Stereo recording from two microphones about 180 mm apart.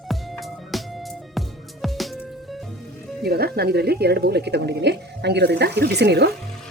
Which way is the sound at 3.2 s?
60° right (ahead or behind).